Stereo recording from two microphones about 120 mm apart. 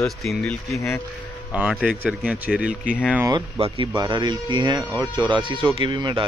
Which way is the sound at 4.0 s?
40° right (ahead or behind).